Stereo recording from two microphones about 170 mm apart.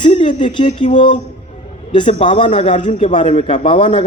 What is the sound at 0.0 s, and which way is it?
A man's voice, 30° left (ahead or behind).